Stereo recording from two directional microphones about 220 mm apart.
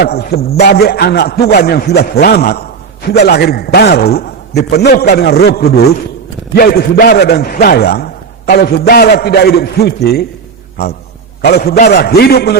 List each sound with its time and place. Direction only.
0.0 s a man's voice: 45° left (ahead or behind)
11.4 s a man's voice: 45° left (ahead or behind)